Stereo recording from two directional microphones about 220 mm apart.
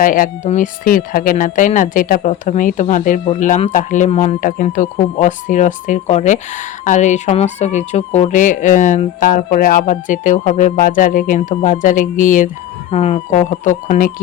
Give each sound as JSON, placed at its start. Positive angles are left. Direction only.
{"t": 0.0, "sound": "speech", "side_deg": 40}